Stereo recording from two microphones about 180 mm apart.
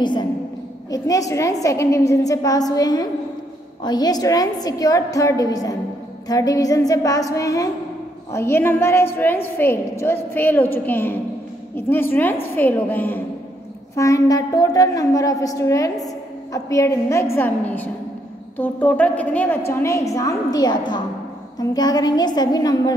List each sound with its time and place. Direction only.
0.0 s a woman's voice: 25° left (ahead or behind)